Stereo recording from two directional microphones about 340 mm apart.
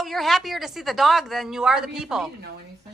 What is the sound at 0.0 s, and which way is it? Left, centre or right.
Speech, centre.